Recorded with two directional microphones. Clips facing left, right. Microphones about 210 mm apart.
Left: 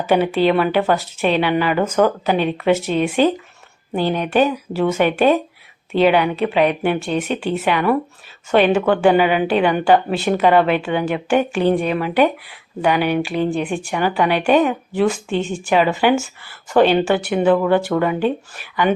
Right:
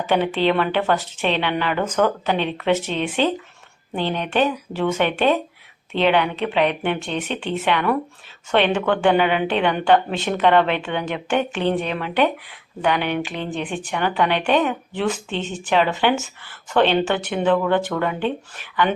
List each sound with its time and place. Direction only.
0.1 s speech: 10° left (ahead or behind)